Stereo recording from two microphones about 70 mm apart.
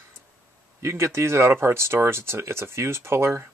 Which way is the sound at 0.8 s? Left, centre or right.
Right.